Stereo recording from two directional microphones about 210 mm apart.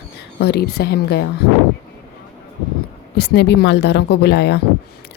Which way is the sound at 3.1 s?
55° left (ahead or behind).